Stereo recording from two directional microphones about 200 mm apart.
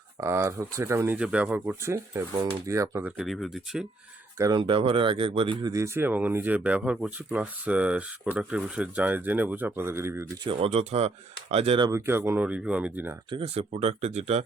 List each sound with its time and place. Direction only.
0.2 s speech: 15° right (ahead or behind)
3.2 s speech: centre (ahead or behind)
4.4 s speech: 20° right (ahead or behind)
10.5 s speech: 30° right (ahead or behind)
11.9 s speech: 15° right (ahead or behind)
13.3 s speech: 30° right (ahead or behind)